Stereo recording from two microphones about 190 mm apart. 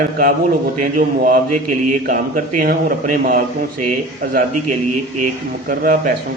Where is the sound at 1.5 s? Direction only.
45° right (ahead or behind).